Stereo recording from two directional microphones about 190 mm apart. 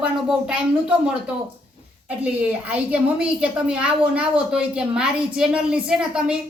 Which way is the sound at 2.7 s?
5° right (ahead or behind).